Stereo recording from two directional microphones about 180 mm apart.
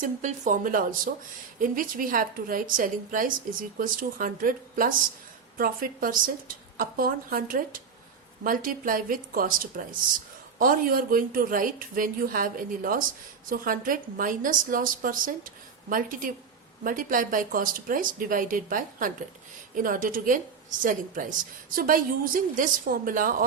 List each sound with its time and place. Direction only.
0.0 s a woman's voice: 40° right (ahead or behind)